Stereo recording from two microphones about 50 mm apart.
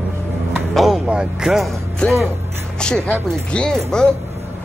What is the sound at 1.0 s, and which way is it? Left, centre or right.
Speech, centre.